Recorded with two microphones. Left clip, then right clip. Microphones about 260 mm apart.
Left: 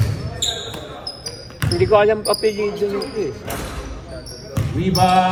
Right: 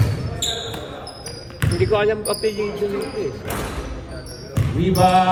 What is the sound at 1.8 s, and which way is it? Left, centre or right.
Speech, centre.